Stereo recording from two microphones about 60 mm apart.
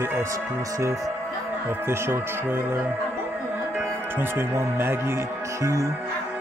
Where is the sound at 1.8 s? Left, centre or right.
Right.